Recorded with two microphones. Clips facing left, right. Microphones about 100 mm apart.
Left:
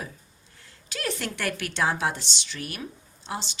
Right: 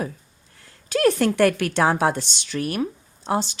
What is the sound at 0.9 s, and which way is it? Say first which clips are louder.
Speech: right 13 dB; 50° right (ahead or behind).